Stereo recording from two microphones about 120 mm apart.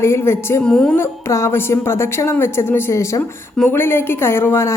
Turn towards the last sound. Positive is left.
turn(degrees=20)  # may be behind; listen again after turning